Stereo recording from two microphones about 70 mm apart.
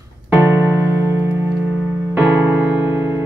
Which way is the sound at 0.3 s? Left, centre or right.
Right.